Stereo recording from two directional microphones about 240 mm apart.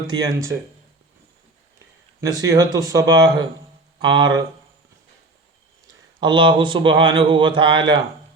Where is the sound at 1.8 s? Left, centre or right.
Centre.